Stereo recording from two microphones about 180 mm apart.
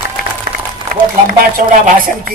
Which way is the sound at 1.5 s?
50° right (ahead or behind).